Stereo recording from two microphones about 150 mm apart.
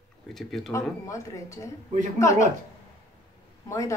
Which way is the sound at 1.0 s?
20° left (ahead or behind).